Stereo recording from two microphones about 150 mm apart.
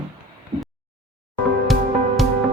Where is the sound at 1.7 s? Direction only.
Centre (ahead or behind).